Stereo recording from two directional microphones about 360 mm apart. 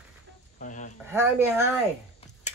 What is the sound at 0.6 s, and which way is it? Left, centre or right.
Speech, left.